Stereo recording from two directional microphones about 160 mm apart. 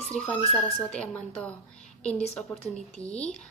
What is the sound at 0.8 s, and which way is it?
Speech, 5° left (ahead or behind).